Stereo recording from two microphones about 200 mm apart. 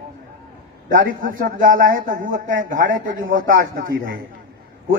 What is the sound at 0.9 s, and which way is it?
A man's voice, 45° right (ahead or behind).